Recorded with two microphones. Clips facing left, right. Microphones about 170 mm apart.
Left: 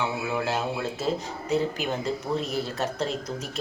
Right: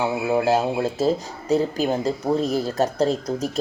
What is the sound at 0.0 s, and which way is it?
Speech, 40° right (ahead or behind).